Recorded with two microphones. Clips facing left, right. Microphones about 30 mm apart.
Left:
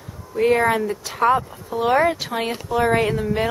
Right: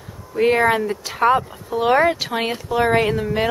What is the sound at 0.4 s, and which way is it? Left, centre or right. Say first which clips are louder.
Speech: right 1 dB; right.